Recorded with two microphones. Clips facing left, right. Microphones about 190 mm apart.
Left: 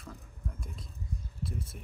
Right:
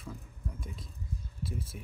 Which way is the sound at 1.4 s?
Centre (ahead or behind).